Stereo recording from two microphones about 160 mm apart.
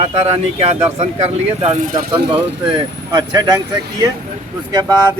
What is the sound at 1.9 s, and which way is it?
Speech, 30° right (ahead or behind).